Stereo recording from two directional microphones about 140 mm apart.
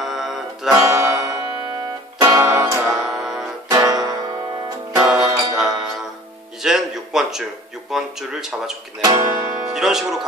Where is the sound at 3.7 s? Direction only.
25° right (ahead or behind).